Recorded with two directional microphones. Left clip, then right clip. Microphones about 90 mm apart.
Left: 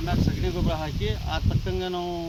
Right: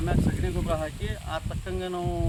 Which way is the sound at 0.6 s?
30° right (ahead or behind).